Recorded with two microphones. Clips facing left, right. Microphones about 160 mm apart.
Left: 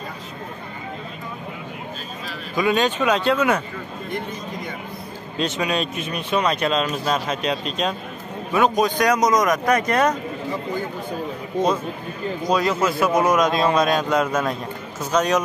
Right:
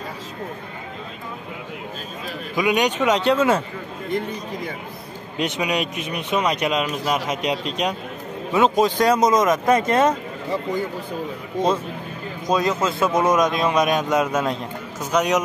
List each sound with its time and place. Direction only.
2.5 s a man's voice: 15° right (ahead or behind)
5.4 s a man's voice: 15° right (ahead or behind)
12.4 s a man's voice: 20° right (ahead or behind)